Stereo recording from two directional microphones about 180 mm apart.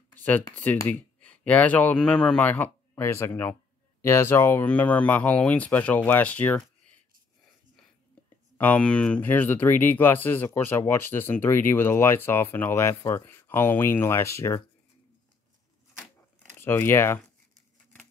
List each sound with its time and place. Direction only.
0.1 s a sound: 10° left (ahead or behind)
0.6 s speech: 10° left (ahead or behind)
8.5 s speech: 10° left (ahead or behind)
16.5 s speech: 10° left (ahead or behind)